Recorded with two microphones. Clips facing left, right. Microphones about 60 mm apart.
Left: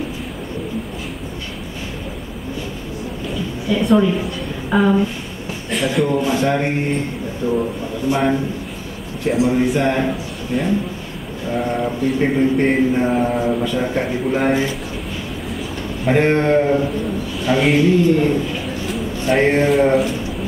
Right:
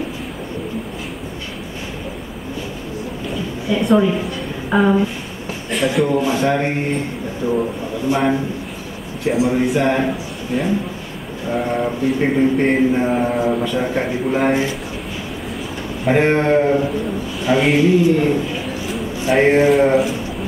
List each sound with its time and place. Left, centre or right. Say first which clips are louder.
3.3 s a sound: even; centre
5.7 s a man's voice: right 1 dB; centre
16.1 s a man's voice: even; centre